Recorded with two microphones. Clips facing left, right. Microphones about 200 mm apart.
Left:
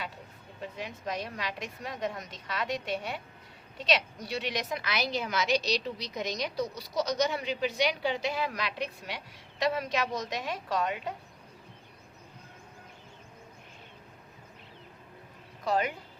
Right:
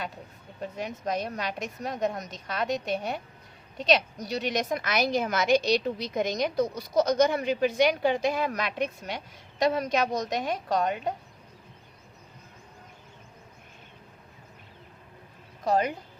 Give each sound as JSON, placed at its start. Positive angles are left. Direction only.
{"t": 0.6, "sound": "a woman's voice", "side_deg": -45}
{"t": 15.6, "sound": "a woman's voice", "side_deg": -40}